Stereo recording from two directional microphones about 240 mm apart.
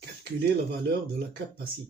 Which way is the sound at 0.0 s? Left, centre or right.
Right.